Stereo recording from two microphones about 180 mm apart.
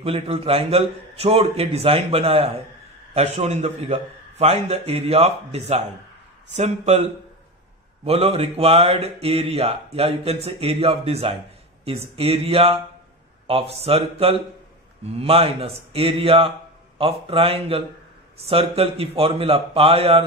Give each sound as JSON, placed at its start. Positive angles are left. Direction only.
{"t": 0.0, "sound": "speech", "side_deg": -30}